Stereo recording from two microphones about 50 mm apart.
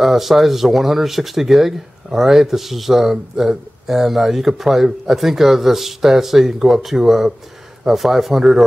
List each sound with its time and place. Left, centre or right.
0.0 s speech: centre